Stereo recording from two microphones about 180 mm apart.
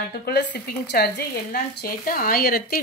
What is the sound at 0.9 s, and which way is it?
Speech, 65° left (ahead or behind).